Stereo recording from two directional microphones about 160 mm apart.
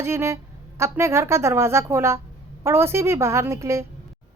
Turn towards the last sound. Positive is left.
turn(degrees=-15)  # may be behind; listen again after turning